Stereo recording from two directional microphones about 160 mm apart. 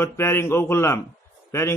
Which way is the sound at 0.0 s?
15° left (ahead or behind).